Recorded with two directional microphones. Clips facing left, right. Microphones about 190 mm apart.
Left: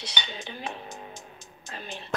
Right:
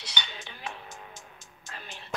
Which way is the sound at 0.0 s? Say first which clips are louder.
Left 4 dB; 20° left (ahead or behind).